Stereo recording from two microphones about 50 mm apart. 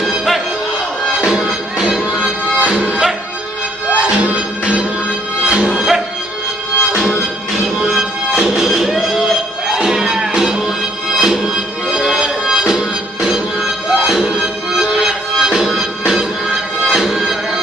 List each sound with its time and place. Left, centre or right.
0.0 s music: centre
1.2 s music: centre
3.9 s music: right
5.7 s music: centre